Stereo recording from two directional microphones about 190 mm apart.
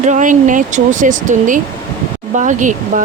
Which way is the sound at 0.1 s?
40° right (ahead or behind).